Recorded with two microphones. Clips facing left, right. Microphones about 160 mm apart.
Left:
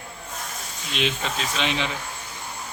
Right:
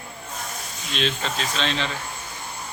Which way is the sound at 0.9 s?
15° left (ahead or behind).